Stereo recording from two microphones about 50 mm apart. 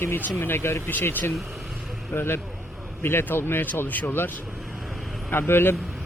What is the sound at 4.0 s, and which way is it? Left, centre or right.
Speech, left.